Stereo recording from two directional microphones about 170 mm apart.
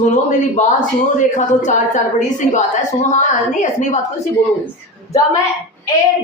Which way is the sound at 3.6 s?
45° left (ahead or behind).